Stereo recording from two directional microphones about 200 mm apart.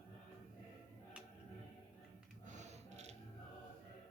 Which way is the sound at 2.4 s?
35° right (ahead or behind).